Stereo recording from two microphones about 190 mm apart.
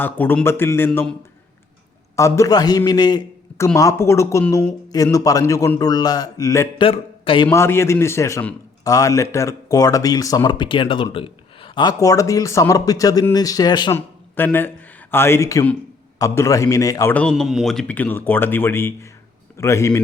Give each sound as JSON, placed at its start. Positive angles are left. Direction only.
{"t": 0.0, "sound": "a man's voice", "side_deg": 10}
{"t": 2.1, "sound": "a man's voice", "side_deg": 15}
{"t": 6.8, "sound": "speech", "side_deg": 30}
{"t": 7.4, "sound": "a man's voice", "side_deg": 15}
{"t": 13.9, "sound": "a man's voice", "side_deg": 10}